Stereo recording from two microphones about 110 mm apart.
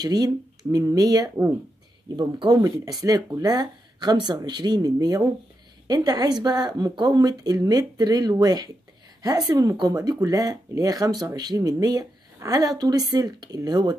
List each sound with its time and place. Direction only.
0.0 s speech: 35° right (ahead or behind)